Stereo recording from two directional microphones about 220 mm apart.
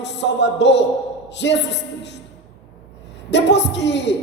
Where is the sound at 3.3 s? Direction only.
55° left (ahead or behind).